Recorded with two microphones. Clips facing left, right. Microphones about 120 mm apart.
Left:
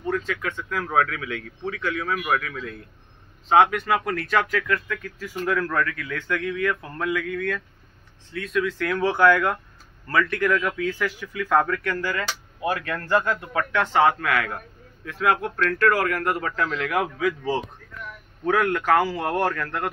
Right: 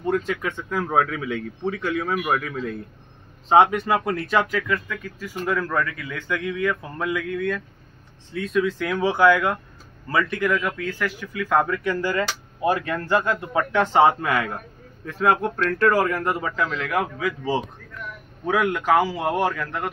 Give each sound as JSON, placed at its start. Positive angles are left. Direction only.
{"t": 0.8, "sound": "a man's voice", "side_deg": -20}
{"t": 1.6, "sound": "speech", "side_deg": -35}
{"t": 2.0, "sound": "a man's voice", "side_deg": -25}
{"t": 3.7, "sound": "speech", "side_deg": -25}
{"t": 8.3, "sound": "a man's voice", "side_deg": -25}
{"t": 12.0, "sound": "a man's voice", "side_deg": -25}
{"t": 12.6, "sound": "a man's voice", "side_deg": -15}